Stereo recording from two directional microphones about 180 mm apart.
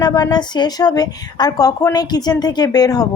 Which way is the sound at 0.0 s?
20° left (ahead or behind).